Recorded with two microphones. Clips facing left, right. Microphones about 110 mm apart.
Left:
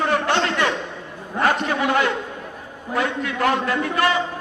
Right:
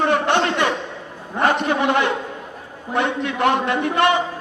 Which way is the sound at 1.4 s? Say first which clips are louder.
Right 2 dB; 20° right (ahead or behind).